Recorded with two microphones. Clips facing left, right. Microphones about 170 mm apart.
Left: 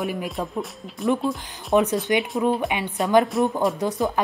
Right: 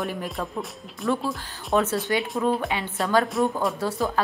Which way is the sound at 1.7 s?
15° left (ahead or behind).